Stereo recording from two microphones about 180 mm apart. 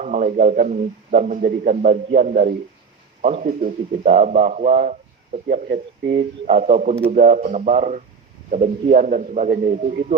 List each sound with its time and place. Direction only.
0.0 s a man's voice: 45° right (ahead or behind)
1.4 s a man's voice: 50° right (ahead or behind)
1.8 s speech: 35° right (ahead or behind)
6.1 s a man's voice: 35° right (ahead or behind)